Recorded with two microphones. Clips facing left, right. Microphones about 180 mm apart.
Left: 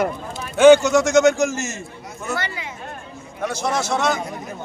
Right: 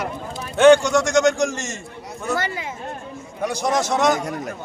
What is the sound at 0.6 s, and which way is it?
A man's voice, centre (ahead or behind).